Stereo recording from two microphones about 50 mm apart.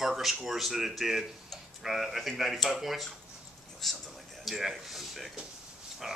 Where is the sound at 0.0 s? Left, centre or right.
Centre.